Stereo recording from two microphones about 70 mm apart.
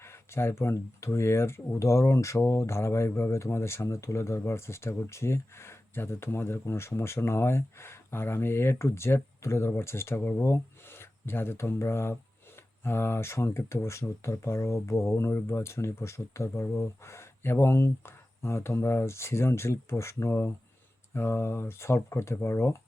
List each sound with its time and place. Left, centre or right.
0.0 s speech: left